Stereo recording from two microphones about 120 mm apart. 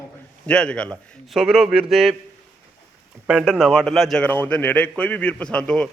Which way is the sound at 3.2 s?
5° right (ahead or behind).